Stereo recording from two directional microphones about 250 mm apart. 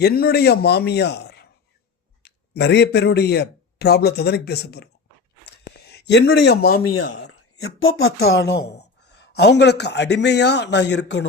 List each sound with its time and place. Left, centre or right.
0.0 s a man's voice: left
5.5 s a sound: left
6.4 s a man's voice: left
7.3 s speech: left